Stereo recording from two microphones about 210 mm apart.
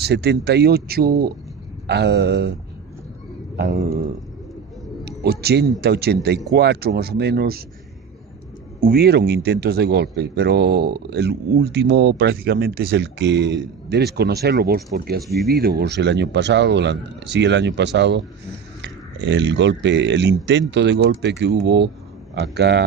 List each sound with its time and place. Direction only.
0.0 s speech: 50° right (ahead or behind)
3.5 s speech: 45° right (ahead or behind)
5.2 s speech: 50° right (ahead or behind)
8.8 s speech: 50° right (ahead or behind)